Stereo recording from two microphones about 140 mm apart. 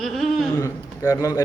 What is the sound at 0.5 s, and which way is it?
Speech, 20° left (ahead or behind).